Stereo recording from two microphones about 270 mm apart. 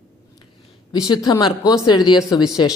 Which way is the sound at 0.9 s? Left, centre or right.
Centre.